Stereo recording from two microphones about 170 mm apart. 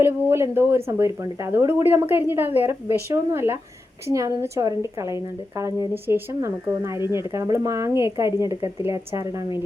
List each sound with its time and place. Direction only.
0.0 s speech: 15° right (ahead or behind)